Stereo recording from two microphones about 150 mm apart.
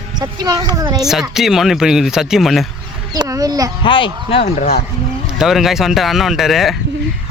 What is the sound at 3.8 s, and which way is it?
Speech, 35° left (ahead or behind).